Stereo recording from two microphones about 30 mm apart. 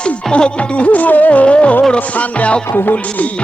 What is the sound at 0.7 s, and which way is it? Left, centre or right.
Music, left.